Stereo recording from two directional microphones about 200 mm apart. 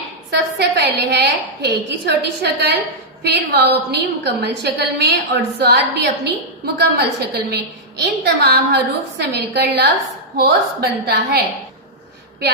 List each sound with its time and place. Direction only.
0.3 s a woman's voice: 55° right (ahead or behind)